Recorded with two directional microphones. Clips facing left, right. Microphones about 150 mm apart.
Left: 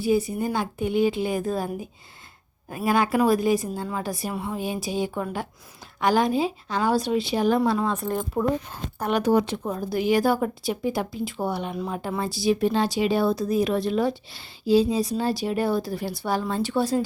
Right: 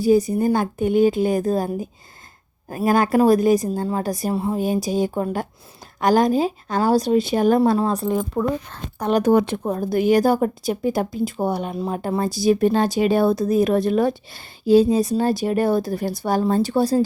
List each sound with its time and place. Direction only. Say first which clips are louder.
0.0 s a woman's voice: right 6 dB; 40° right (ahead or behind)
8.3 s speech: right 2 dB; 10° left (ahead or behind)
9.0 s a woman's voice: right 5 dB; 40° right (ahead or behind)
9.3 s a woman's voice: right 4 dB; 55° right (ahead or behind); by 17.0 s 40° right (ahead or behind)